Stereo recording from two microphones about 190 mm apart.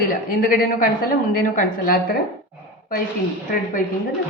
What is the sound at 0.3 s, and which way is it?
A woman's voice, 45° left (ahead or behind).